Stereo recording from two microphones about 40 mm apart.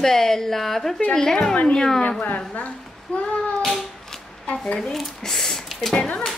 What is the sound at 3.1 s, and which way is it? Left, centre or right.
Speech, left.